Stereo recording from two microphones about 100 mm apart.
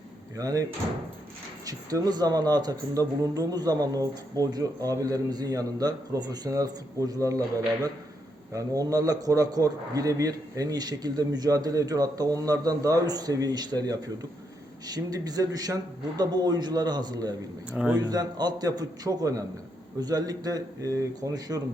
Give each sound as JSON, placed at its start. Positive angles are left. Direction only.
{"t": 0.3, "sound": "speech", "side_deg": -35}
{"t": 17.7, "sound": "a man's voice", "side_deg": -10}
{"t": 18.0, "sound": "speech", "side_deg": -45}